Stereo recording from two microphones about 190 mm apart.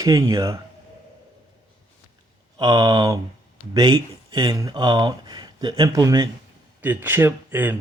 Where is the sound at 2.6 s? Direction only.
20° right (ahead or behind).